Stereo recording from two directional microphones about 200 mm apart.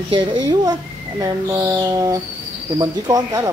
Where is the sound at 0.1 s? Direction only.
20° right (ahead or behind).